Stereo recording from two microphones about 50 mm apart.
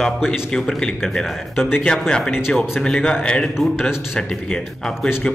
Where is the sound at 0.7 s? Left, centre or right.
Centre.